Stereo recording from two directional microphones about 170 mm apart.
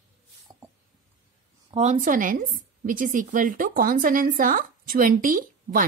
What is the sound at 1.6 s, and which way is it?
A woman's voice, 40° right (ahead or behind).